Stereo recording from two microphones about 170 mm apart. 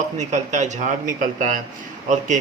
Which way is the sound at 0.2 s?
45° right (ahead or behind).